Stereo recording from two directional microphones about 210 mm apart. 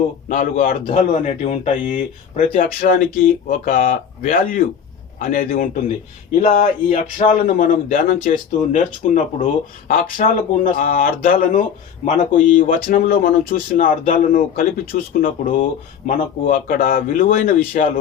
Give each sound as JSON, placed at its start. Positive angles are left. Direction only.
{"t": 0.3, "sound": "speech", "side_deg": 40}